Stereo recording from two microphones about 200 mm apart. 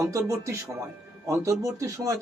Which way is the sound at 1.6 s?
15° right (ahead or behind).